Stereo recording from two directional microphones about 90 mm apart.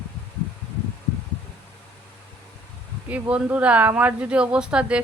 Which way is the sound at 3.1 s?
15° right (ahead or behind).